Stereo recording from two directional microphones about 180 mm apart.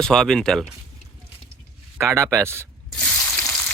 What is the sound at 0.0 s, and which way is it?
Speech, 5° left (ahead or behind).